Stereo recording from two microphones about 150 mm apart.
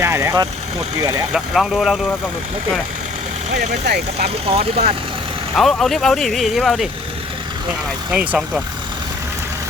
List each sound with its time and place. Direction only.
0.0 s speech: 20° right (ahead or behind)
1.3 s speech: centre (ahead or behind)
3.6 s speech: 90° right
4.4 s speech: 40° right (ahead or behind)
5.5 s speech: centre (ahead or behind)
8.1 s speech: 10° right (ahead or behind)